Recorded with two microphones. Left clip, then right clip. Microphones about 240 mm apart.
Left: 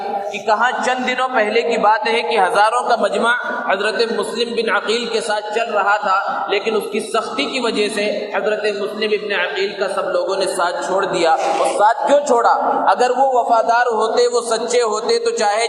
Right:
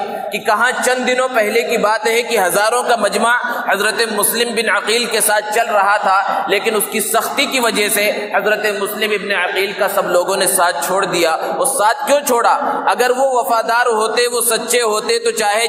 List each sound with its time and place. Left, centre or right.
0.4 s a man's voice: right